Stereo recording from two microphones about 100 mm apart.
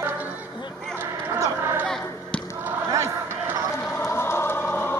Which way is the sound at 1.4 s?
25° right (ahead or behind).